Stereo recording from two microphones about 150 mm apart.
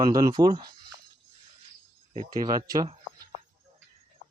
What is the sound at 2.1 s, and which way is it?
Speech, 30° right (ahead or behind).